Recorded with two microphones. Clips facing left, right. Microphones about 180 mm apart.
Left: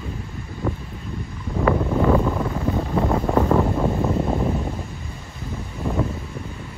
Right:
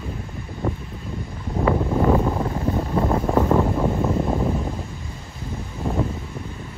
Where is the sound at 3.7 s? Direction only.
Centre (ahead or behind).